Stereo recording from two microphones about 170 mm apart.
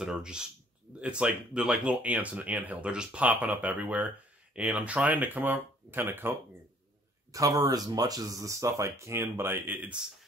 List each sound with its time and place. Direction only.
0.0 s speech: 5° right (ahead or behind)
7.3 s speech: 20° right (ahead or behind)